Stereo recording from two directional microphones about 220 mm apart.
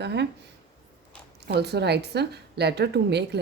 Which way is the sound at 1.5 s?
50° right (ahead or behind).